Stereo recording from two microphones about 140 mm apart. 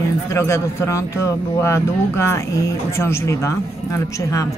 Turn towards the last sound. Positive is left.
turn(degrees=20)  # may be behind; listen again after turning